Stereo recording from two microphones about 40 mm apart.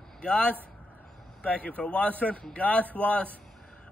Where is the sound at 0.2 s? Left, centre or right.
Left.